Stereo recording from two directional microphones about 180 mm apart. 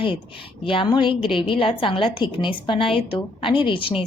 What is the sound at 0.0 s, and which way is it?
A woman's voice, 30° left (ahead or behind).